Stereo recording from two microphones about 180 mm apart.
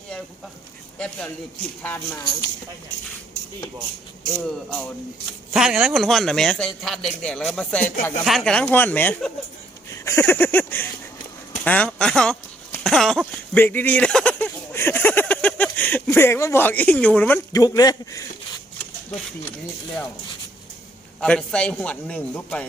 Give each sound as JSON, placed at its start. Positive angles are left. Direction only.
{"t": 0.9, "sound": "a man's voice", "side_deg": 5}
{"t": 5.5, "sound": "a man's voice", "side_deg": -5}
{"t": 9.9, "sound": "a sound", "side_deg": 15}
{"t": 11.6, "sound": "a man's voice", "side_deg": 5}
{"t": 12.8, "sound": "a sound", "side_deg": 0}
{"t": 17.6, "sound": "a man's voice", "side_deg": 20}
{"t": 21.2, "sound": "a man's voice", "side_deg": 5}